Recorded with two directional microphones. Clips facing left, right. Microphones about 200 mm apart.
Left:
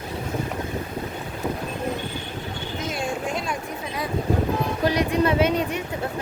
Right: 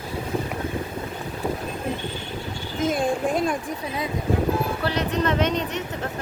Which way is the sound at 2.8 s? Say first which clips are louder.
Right 7 dB; 55° right (ahead or behind).